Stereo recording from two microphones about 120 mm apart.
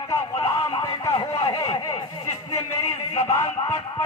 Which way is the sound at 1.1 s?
35° left (ahead or behind).